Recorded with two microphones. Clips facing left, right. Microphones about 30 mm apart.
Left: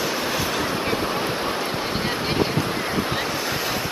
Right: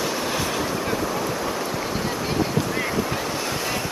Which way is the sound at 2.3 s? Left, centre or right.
Left.